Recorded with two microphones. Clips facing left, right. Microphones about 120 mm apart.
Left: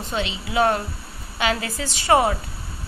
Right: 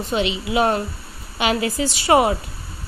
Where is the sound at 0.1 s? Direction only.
15° right (ahead or behind).